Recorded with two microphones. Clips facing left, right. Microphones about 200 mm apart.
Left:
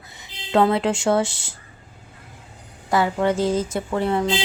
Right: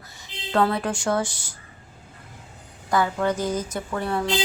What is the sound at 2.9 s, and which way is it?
Speech, 25° left (ahead or behind).